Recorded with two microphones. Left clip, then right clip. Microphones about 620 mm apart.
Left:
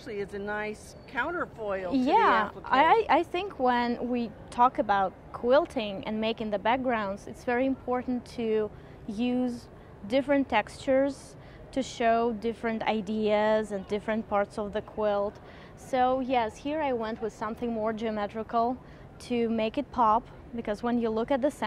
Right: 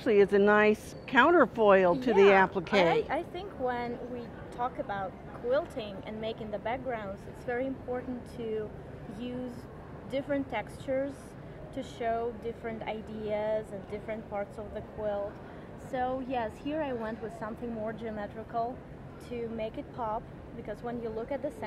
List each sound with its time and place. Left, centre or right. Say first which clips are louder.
0.0 s speech: right 12 dB; right
2.9 s a woman's voice: left 7 dB; left
10.0 s a woman's voice: left 7 dB; left
15.9 s a woman's voice: left 7 dB; left
19.2 s speech: left 8 dB; left